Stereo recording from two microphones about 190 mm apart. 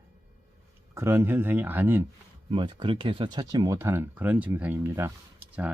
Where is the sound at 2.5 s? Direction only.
25° right (ahead or behind).